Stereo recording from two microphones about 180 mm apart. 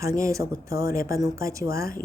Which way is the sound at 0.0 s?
15° right (ahead or behind).